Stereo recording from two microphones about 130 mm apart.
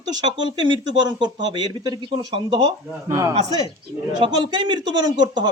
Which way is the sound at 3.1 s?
25° right (ahead or behind).